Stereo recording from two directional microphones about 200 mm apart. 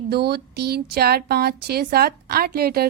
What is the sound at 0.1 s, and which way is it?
A woman's voice, 55° right (ahead or behind).